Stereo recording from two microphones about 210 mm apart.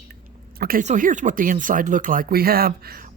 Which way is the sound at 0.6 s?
45° right (ahead or behind).